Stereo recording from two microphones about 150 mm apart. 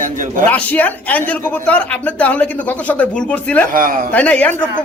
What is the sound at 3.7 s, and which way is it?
Speech, 70° right (ahead or behind).